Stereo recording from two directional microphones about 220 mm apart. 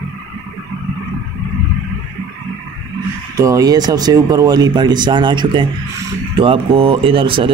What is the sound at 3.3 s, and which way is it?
Speech, 15° right (ahead or behind).